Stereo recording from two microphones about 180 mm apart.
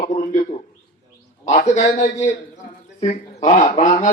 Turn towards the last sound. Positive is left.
turn(degrees=40)  # may be behind; listen again after turning